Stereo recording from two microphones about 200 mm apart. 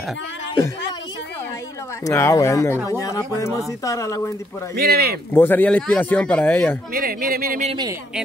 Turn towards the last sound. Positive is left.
turn(degrees=-20)  # may be behind; listen again after turning